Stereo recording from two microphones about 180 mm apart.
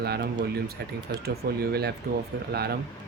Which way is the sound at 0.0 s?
60° right (ahead or behind).